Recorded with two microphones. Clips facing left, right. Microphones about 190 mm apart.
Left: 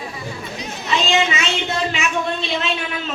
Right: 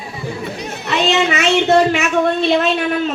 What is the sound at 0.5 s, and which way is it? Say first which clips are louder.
Speech: even; 60° right (ahead or behind).